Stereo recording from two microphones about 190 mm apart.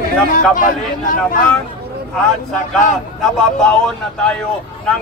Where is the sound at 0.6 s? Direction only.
45° left (ahead or behind).